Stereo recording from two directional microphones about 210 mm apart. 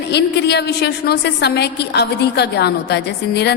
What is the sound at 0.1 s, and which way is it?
A woman's voice, 55° left (ahead or behind).